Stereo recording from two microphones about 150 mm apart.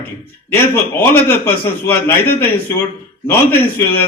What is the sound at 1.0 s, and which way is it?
Speech, 15° left (ahead or behind).